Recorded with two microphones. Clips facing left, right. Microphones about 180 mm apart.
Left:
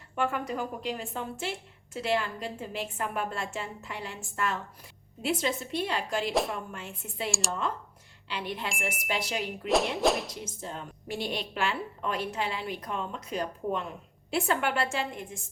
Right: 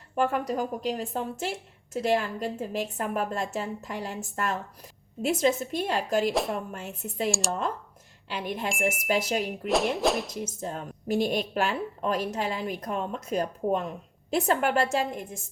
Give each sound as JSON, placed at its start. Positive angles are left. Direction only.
{"t": 0.2, "sound": "a woman's voice", "side_deg": -40}
{"t": 6.3, "sound": "speech", "side_deg": 0}
{"t": 6.7, "sound": "a woman's voice", "side_deg": -40}
{"t": 7.3, "sound": "speech", "side_deg": 0}
{"t": 8.3, "sound": "a woman's voice", "side_deg": -45}
{"t": 9.6, "sound": "speech", "side_deg": 0}
{"t": 10.4, "sound": "a woman's voice", "side_deg": -45}